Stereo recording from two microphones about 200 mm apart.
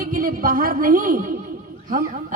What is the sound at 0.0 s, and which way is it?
Speech, 45° right (ahead or behind).